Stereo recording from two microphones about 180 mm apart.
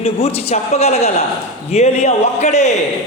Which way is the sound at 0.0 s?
35° left (ahead or behind).